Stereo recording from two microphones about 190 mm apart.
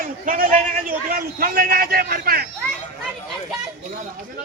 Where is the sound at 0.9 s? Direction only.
50° right (ahead or behind).